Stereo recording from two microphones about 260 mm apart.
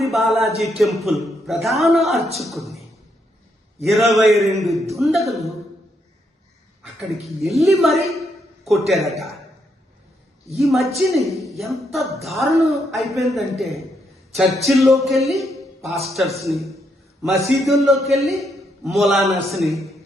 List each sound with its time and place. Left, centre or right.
0.0 s a woman's voice: centre
3.8 s a woman's voice: centre
7.0 s a woman's voice: centre
10.5 s a woman's voice: centre